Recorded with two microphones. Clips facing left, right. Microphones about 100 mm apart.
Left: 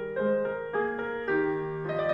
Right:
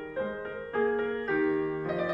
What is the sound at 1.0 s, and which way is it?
Music, 25° left (ahead or behind).